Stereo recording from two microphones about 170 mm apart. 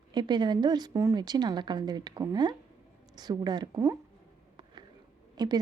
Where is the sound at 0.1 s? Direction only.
25° right (ahead or behind).